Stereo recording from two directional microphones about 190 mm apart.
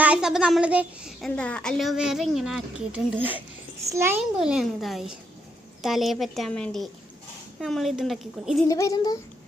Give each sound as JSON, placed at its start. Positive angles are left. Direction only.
{"t": 0.0, "sound": "a child's voice", "side_deg": -5}
{"t": 8.6, "sound": "a child's voice", "side_deg": 20}